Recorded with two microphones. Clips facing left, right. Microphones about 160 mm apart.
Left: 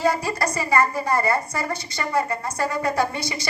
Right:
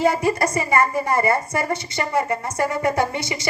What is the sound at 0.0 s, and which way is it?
A woman's voice, 25° right (ahead or behind).